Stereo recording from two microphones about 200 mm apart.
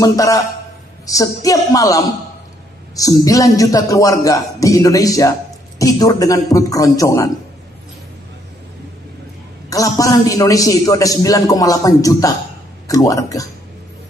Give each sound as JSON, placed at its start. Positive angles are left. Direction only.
{"t": 0.0, "sound": "a man's voice", "side_deg": 15}
{"t": 9.7, "sound": "a man's voice", "side_deg": 15}